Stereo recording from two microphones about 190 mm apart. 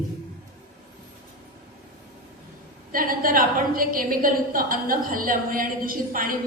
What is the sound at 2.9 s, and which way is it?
A woman's voice, 50° right (ahead or behind).